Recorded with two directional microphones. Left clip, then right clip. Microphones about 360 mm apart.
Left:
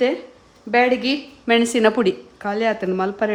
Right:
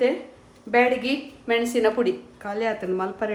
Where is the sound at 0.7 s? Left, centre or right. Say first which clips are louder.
Left 3 dB; left.